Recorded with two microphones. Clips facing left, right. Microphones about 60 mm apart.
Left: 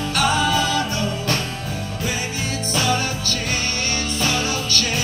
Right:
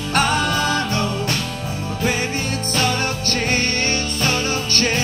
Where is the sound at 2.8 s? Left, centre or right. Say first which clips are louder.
Even; right.